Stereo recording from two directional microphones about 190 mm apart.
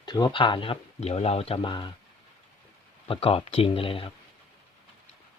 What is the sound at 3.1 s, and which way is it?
Speech, 30° left (ahead or behind).